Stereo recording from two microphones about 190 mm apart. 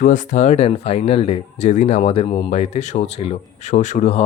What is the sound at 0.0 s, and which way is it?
Speech, 40° left (ahead or behind).